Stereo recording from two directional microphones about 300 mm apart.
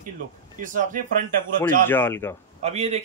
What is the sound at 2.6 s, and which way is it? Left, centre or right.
Speech, right.